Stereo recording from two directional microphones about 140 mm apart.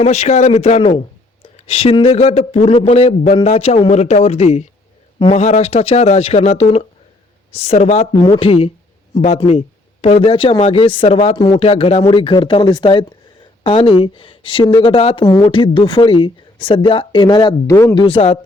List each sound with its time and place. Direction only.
0.0 s speech: 55° left (ahead or behind)
8.1 s speech: 35° left (ahead or behind)
11.3 s speech: 30° left (ahead or behind)
11.6 s speech: 45° left (ahead or behind); by 17.9 s 20° left (ahead or behind)
17.9 s speech: 35° left (ahead or behind)